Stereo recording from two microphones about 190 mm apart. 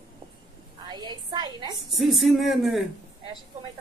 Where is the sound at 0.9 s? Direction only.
20° right (ahead or behind).